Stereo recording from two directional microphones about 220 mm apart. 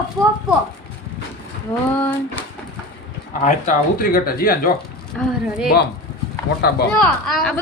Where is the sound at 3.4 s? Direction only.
40° left (ahead or behind).